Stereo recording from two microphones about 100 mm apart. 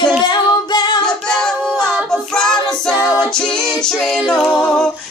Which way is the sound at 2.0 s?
5° left (ahead or behind).